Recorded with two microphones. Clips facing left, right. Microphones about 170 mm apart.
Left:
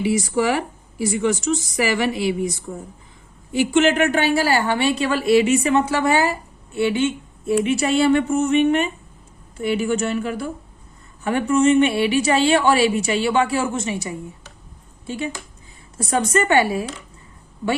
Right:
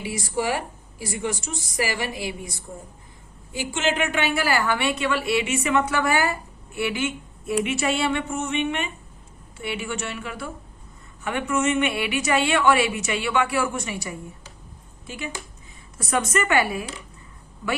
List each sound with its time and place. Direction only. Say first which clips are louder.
0.3 s a woman's voice: left 5 dB; 70° left (ahead or behind)
3.6 s a woman's voice: left 8 dB; 65° left (ahead or behind); by 16.8 s 30° left (ahead or behind)